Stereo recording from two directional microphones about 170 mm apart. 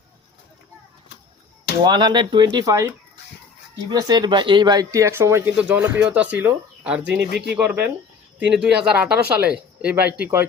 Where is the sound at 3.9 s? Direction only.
25° right (ahead or behind).